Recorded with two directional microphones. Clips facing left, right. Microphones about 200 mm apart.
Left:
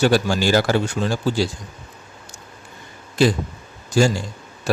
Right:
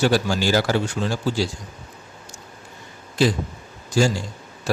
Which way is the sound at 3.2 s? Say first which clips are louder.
Left 2 dB; 55° left (ahead or behind).